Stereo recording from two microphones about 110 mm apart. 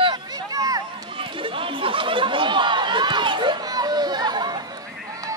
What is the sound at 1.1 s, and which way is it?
Chatter, 50° right (ahead or behind).